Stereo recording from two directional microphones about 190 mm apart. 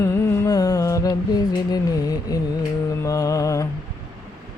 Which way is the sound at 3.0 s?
15° left (ahead or behind).